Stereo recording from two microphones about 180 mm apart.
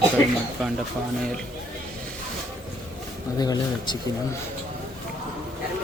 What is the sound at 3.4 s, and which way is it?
Speech, 25° left (ahead or behind).